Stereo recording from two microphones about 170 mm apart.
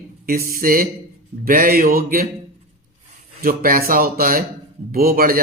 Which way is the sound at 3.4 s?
60° right (ahead or behind).